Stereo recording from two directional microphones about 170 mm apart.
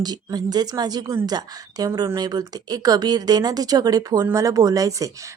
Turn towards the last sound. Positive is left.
turn(degrees=-20)  # may be behind; listen again after turning